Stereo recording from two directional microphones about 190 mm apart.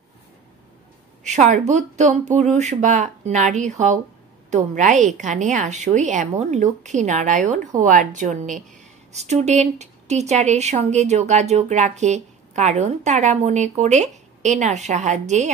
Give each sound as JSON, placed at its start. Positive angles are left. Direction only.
{"t": 1.2, "sound": "a woman's voice", "side_deg": -40}